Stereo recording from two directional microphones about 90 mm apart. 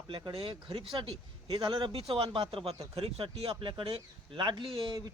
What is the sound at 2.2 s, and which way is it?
Speech, 65° right (ahead or behind).